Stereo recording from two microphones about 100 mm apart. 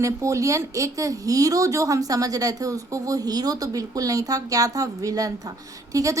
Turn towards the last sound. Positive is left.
turn(degrees=-35)  # may be behind; listen again after turning